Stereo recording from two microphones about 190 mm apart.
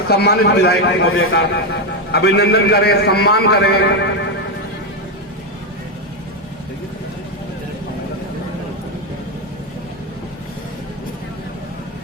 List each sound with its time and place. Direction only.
0.1 s a man's voice: 55° left (ahead or behind); by 1.6 s 75° left (ahead or behind)
2.1 s a man's voice: 55° left (ahead or behind)